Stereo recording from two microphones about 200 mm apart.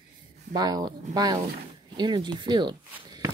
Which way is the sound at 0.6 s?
20° right (ahead or behind).